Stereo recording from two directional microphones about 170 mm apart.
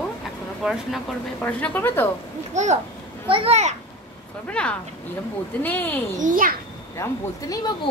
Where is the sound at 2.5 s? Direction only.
45° right (ahead or behind).